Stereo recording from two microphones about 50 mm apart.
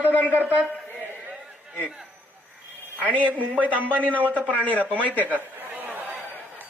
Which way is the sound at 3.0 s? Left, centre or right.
Right.